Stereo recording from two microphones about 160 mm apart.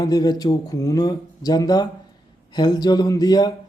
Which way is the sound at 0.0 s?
25° left (ahead or behind).